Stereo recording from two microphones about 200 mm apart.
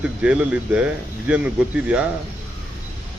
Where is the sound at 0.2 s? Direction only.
5° right (ahead or behind).